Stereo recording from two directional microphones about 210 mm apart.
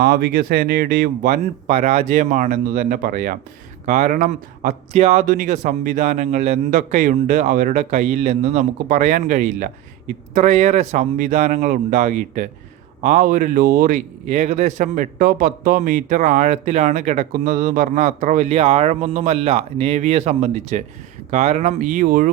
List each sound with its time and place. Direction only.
0.0 s speech: 45° right (ahead or behind)